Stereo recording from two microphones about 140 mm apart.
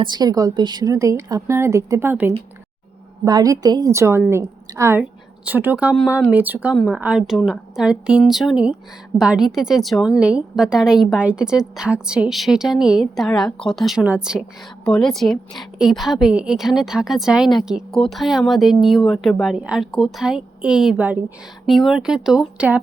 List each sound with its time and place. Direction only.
0.0 s a woman's voice: 30° right (ahead or behind); by 21.3 s 10° right (ahead or behind)
21.7 s a woman's voice: centre (ahead or behind)